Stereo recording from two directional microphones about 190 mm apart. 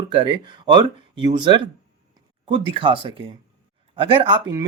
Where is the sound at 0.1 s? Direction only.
25° right (ahead or behind).